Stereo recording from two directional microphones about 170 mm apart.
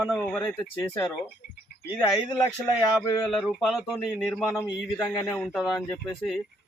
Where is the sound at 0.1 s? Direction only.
5° left (ahead or behind).